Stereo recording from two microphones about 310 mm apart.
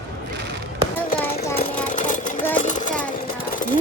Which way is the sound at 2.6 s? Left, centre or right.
Left.